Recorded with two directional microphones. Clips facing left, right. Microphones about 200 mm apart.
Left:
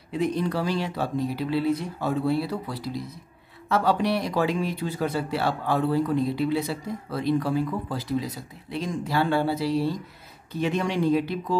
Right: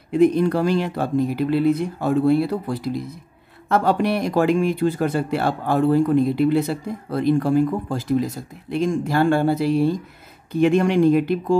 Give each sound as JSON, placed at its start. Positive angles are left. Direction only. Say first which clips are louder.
{"t": 0.1, "sound": "speech", "louder": "right 9 dB", "side_deg": -50}